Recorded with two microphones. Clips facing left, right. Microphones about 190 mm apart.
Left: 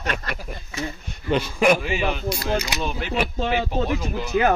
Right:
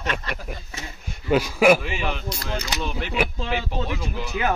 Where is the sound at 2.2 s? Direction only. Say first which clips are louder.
Left 6 dB; 10° left (ahead or behind).